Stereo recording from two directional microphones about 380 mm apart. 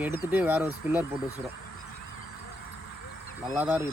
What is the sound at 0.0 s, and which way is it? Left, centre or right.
Speech, centre.